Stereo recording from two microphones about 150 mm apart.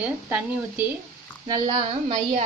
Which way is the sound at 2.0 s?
50° right (ahead or behind).